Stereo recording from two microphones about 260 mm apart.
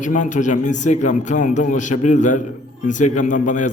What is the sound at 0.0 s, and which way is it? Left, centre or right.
A man's voice, left.